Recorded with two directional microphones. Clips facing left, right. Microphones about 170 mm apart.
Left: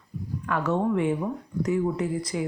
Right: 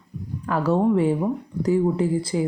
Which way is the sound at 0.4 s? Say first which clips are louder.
Right 5 dB; 35° right (ahead or behind).